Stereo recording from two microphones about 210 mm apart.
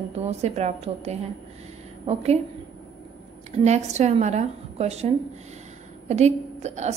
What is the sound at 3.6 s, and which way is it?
A woman's voice, 30° right (ahead or behind).